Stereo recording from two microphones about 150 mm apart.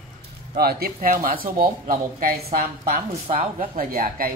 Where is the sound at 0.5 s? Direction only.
90° right; by 3.0 s 75° right (ahead or behind).